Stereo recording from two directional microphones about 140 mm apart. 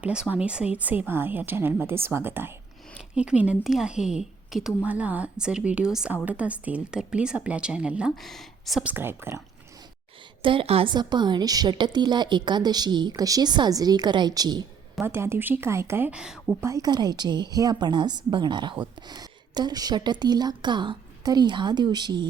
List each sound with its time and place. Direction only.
0.0 s a woman's voice: 10° right (ahead or behind)
8.9 s a woman's voice: 15° right (ahead or behind)
10.4 s a woman's voice: 40° right (ahead or behind)
15.0 s a woman's voice: 15° right (ahead or behind)
16.6 s a woman's voice: 20° right (ahead or behind)